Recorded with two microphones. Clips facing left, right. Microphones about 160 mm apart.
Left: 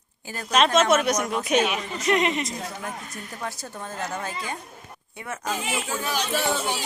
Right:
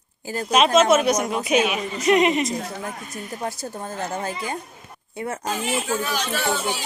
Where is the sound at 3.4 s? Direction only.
35° right (ahead or behind).